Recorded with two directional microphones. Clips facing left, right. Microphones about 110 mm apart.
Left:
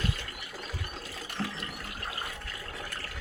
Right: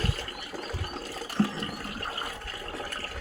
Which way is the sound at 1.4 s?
35° right (ahead or behind).